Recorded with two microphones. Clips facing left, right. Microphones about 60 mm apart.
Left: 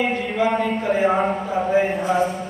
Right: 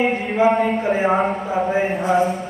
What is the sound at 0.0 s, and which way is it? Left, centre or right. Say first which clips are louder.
Speech: right 3 dB; right.